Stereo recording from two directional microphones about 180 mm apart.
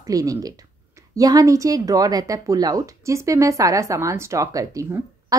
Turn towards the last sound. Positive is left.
turn(degrees=-20)  # may be behind; listen again after turning